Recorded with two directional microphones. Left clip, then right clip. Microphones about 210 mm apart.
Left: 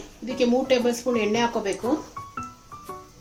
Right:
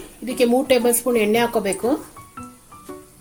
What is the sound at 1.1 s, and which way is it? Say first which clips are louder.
Speech: right 5 dB; 40° right (ahead or behind).